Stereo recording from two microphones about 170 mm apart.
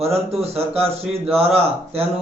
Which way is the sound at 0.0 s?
35° right (ahead or behind).